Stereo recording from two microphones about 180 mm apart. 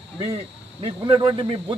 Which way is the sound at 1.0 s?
25° right (ahead or behind).